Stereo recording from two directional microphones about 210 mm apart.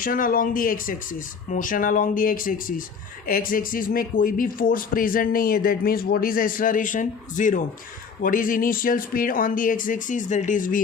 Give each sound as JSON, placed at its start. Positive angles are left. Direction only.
{"t": 0.0, "sound": "speech", "side_deg": 40}